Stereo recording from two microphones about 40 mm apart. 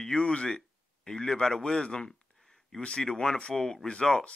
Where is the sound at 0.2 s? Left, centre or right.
Left.